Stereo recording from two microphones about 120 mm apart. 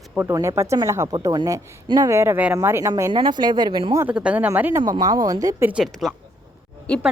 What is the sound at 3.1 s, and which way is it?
Speech, 40° right (ahead or behind).